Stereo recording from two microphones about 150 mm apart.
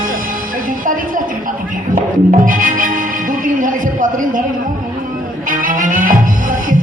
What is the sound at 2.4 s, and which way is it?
Music, 65° right (ahead or behind).